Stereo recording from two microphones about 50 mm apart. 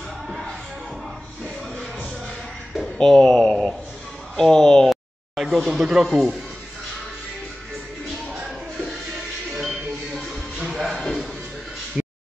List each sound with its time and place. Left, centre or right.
3.0 s speech: centre
5.4 s speech: centre
8.9 s music: centre